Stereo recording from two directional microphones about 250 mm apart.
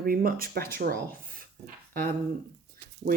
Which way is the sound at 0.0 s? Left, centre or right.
Right.